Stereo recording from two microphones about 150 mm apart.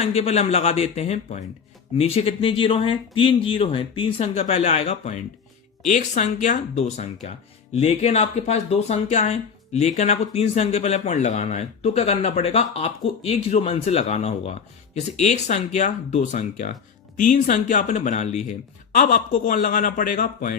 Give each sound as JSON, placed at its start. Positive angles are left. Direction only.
{"t": 0.0, "sound": "speech", "side_deg": 45}